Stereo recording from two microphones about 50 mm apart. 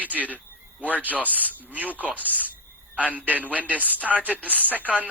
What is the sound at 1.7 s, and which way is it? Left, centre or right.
Speech, right.